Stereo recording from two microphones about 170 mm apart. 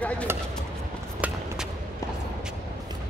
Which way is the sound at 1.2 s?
10° right (ahead or behind).